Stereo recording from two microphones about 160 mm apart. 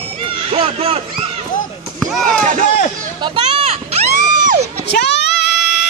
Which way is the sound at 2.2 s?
50° right (ahead or behind).